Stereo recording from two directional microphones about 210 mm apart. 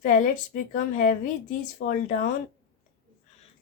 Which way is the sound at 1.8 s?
55° left (ahead or behind).